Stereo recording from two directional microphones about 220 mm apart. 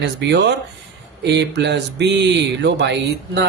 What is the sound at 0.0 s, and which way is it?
Speech, 50° right (ahead or behind).